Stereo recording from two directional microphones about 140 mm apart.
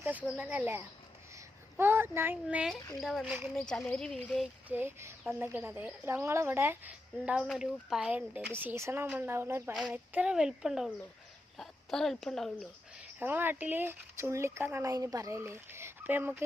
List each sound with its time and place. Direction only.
0.3 s speech: 10° right (ahead or behind)
4.7 s speech: 15° right (ahead or behind)
9.7 s speech: centre (ahead or behind)
13.1 s speech: 15° right (ahead or behind)